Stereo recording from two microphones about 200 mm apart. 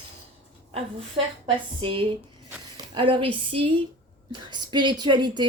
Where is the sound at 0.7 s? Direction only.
30° right (ahead or behind).